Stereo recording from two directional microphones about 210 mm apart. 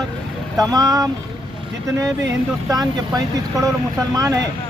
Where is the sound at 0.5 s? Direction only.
15° right (ahead or behind).